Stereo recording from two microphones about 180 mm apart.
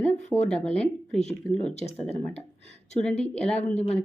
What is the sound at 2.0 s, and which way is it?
Speech, 35° left (ahead or behind).